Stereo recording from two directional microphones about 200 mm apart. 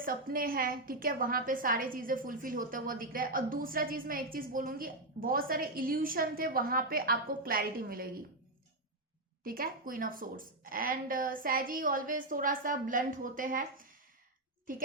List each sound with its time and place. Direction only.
0.0 s a woman's voice: 45° right (ahead or behind)
9.4 s a woman's voice: 45° right (ahead or behind)